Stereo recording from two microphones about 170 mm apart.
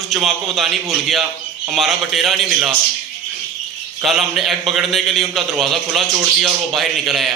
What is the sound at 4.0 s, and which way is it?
A man's voice, centre (ahead or behind).